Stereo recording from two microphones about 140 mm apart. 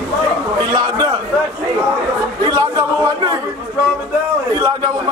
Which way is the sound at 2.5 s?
30° right (ahead or behind).